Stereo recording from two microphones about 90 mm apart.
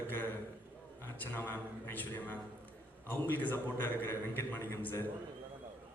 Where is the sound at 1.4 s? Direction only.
20° left (ahead or behind).